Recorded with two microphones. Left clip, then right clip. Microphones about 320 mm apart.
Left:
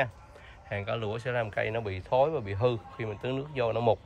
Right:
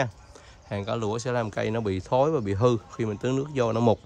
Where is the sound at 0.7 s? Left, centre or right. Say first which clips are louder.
Right 4 dB; centre.